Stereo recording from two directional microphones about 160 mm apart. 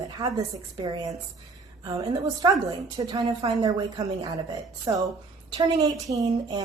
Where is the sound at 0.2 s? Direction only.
20° right (ahead or behind).